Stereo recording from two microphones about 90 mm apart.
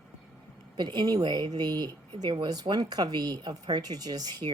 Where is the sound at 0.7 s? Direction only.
55° right (ahead or behind).